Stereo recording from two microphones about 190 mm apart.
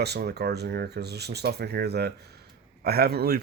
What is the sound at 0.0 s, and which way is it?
Speech, 60° right (ahead or behind).